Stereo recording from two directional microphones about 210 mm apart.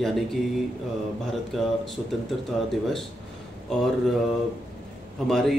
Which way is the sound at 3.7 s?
Centre (ahead or behind).